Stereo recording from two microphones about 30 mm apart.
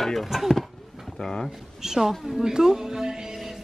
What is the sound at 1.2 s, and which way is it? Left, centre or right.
Speech, centre.